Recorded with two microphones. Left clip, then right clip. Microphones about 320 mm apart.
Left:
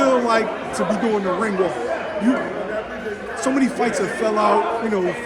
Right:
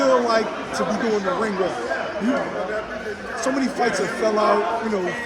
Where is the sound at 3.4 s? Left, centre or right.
Left.